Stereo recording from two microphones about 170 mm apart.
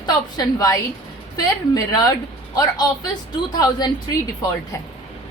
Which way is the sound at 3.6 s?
25° left (ahead or behind).